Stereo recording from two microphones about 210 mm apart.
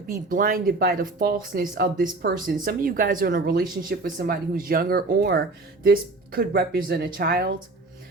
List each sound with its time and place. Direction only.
0.3 s speech: 40° right (ahead or behind)